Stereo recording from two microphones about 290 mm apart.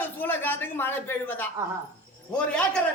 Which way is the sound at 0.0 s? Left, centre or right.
Centre.